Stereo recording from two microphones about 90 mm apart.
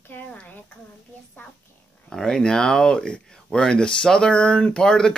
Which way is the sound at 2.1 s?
5° left (ahead or behind).